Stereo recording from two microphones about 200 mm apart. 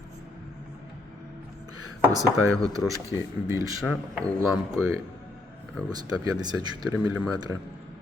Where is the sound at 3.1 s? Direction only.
10° right (ahead or behind).